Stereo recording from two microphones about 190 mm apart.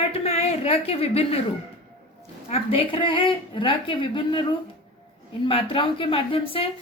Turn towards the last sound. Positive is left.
turn(degrees=30)  # may be behind; listen again after turning